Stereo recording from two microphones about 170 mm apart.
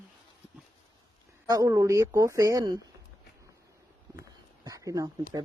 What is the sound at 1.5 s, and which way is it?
A woman's voice, 20° right (ahead or behind).